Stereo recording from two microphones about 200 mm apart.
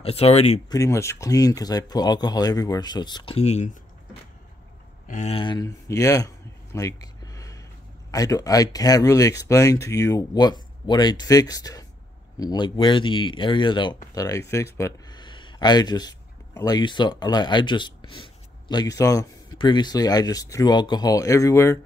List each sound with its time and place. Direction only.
0.0 s speech: 30° left (ahead or behind)
0.7 s speech: 15° left (ahead or behind); by 3.7 s 35° left (ahead or behind)
5.0 s a sound: 35° left (ahead or behind); by 7.6 s 15° left (ahead or behind)
8.1 s speech: 15° left (ahead or behind)